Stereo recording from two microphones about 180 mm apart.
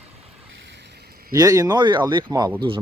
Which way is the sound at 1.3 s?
20° right (ahead or behind).